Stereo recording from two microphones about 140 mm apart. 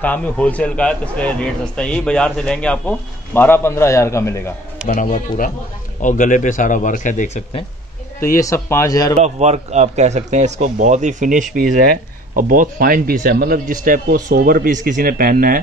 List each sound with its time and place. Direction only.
0.0 s a man's voice: 10° left (ahead or behind)
4.8 s speech: 75° left (ahead or behind)
8.4 s speech: 20° left (ahead or behind)
9.2 s speech: 50° right (ahead or behind); by 11.6 s 65° right (ahead or behind)
11.7 s speech: 75° right (ahead or behind)